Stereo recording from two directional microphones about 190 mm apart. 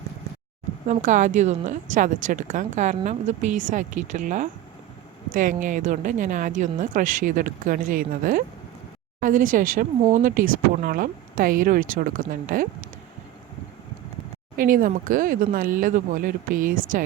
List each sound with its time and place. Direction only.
0.9 s a woman's voice: 40° right (ahead or behind)
14.5 s speech: 50° right (ahead or behind)